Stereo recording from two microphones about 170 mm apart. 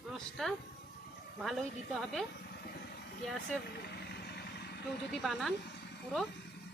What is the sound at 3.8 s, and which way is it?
Vehicle, 70° left (ahead or behind).